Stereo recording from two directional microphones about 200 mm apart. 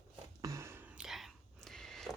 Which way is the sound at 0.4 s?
15° right (ahead or behind).